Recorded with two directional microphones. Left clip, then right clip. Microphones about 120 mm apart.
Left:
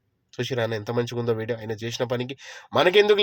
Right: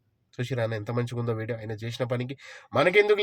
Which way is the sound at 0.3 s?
15° left (ahead or behind).